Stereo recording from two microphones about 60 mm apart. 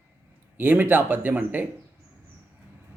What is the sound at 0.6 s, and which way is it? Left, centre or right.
A man's voice, right.